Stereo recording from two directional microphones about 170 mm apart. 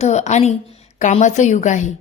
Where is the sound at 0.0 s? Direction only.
40° left (ahead or behind).